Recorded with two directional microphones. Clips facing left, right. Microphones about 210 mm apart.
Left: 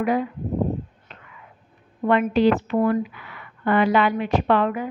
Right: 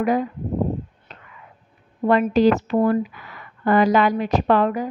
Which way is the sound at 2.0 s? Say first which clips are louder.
Right 2 dB; 40° right (ahead or behind).